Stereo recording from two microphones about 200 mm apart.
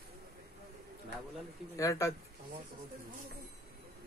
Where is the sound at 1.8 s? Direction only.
15° left (ahead or behind).